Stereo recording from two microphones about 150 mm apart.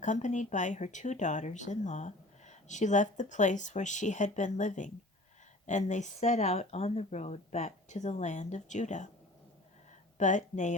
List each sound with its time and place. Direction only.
0.0 s speech: 55° left (ahead or behind)
10.2 s speech: 55° left (ahead or behind)